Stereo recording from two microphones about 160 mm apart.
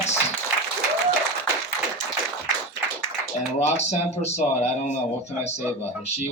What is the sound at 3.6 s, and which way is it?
Speech, 45° left (ahead or behind).